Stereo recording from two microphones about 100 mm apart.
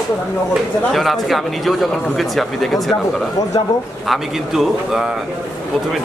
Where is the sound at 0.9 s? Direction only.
Centre (ahead or behind).